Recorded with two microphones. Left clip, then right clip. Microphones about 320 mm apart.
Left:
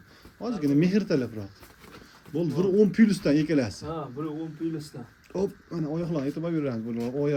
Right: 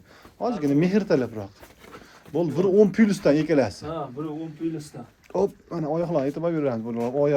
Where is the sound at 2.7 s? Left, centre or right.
Centre.